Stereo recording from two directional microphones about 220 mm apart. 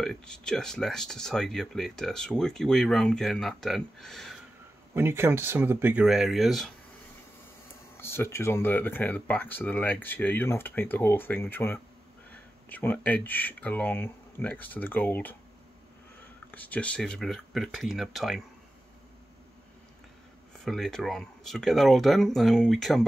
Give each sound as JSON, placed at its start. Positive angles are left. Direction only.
{"t": 0.0, "sound": "speech", "side_deg": 5}
{"t": 4.9, "sound": "speech", "side_deg": -10}
{"t": 8.0, "sound": "speech", "side_deg": 10}
{"t": 16.5, "sound": "speech", "side_deg": 5}
{"t": 20.6, "sound": "speech", "side_deg": 0}